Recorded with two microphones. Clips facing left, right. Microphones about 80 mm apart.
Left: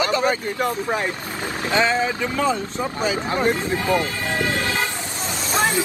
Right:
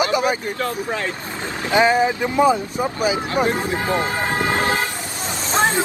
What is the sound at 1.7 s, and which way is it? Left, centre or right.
Speech, centre.